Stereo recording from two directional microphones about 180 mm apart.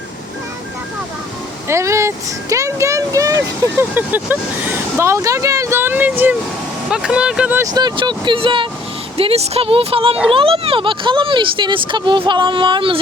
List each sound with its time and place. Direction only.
1.6 s speech: 15° right (ahead or behind)
7.7 s speech: 25° right (ahead or behind)